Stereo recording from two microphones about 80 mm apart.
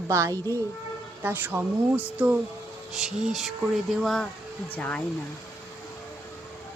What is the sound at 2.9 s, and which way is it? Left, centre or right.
Speech, centre.